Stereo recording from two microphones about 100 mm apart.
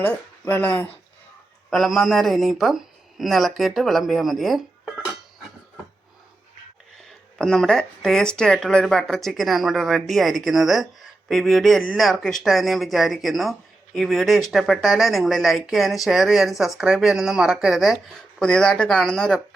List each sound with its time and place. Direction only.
0.0 s speech: 20° left (ahead or behind)
1.7 s speech: centre (ahead or behind)
7.3 s speech: 5° left (ahead or behind)